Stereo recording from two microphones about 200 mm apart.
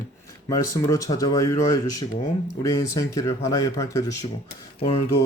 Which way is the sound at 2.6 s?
15° left (ahead or behind).